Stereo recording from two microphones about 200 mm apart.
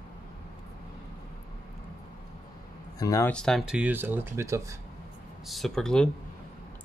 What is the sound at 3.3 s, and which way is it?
Speech, 5° left (ahead or behind).